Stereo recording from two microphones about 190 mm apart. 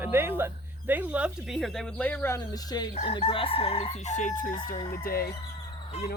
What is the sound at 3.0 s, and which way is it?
Chicken, 30° left (ahead or behind).